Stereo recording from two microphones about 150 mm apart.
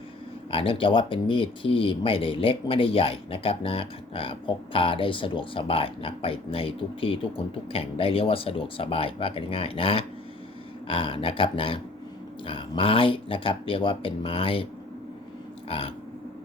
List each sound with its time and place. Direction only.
0.5 s speech: 35° left (ahead or behind)
15.7 s speech: 40° left (ahead or behind)